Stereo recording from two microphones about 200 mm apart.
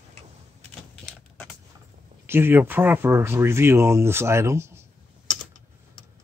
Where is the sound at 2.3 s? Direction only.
10° right (ahead or behind).